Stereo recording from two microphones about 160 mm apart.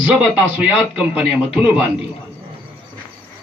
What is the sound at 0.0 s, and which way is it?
Speech, 10° right (ahead or behind).